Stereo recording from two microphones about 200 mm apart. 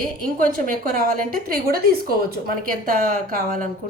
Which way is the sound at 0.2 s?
45° right (ahead or behind).